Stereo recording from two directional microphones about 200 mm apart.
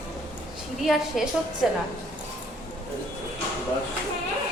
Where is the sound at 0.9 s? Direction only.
Centre (ahead or behind).